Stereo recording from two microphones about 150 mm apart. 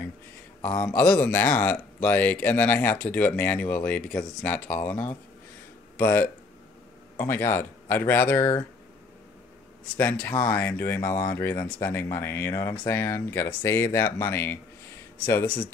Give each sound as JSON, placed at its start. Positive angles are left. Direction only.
{"t": 0.6, "sound": "speech", "side_deg": 10}
{"t": 9.9, "sound": "speech", "side_deg": 10}